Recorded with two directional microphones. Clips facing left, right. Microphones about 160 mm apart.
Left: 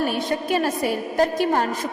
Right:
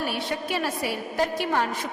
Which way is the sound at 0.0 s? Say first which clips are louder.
Left 5 dB; 45° left (ahead or behind).